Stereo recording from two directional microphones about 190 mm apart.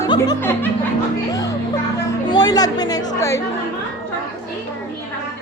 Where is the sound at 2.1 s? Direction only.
20° left (ahead or behind).